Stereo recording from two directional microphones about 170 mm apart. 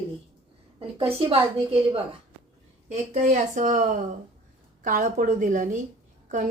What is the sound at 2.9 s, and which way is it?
Speech, 45° right (ahead or behind).